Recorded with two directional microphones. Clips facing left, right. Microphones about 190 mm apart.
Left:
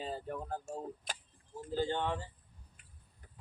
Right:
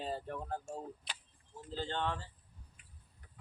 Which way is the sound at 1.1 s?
45° left (ahead or behind).